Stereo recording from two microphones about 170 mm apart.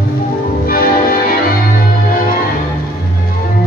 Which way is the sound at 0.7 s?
60° left (ahead or behind).